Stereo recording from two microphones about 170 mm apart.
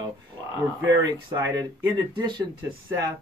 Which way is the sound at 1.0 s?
25° right (ahead or behind).